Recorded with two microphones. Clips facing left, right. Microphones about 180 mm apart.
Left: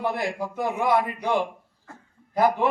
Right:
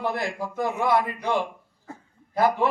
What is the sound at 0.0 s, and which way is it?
A man's voice, 15° left (ahead or behind).